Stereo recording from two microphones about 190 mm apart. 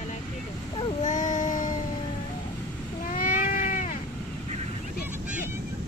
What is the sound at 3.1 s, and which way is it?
Cat, 50° left (ahead or behind).